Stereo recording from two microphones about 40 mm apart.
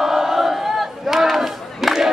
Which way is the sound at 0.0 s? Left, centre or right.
Centre.